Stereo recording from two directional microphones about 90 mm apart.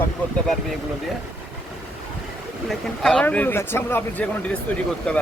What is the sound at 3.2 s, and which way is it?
Speech, 20° left (ahead or behind).